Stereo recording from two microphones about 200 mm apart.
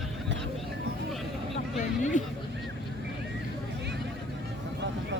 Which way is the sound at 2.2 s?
40° left (ahead or behind).